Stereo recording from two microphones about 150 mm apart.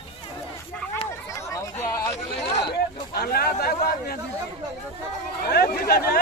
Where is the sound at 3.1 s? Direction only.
90° left.